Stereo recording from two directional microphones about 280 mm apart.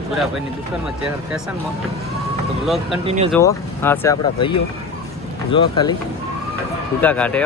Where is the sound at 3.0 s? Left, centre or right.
Right.